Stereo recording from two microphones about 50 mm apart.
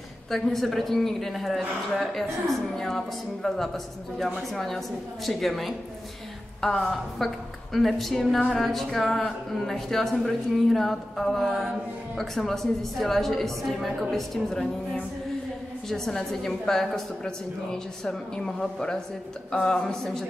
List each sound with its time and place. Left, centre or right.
0.3 s speech: centre
8.4 s a woman's voice: centre
8.6 s a woman's voice: centre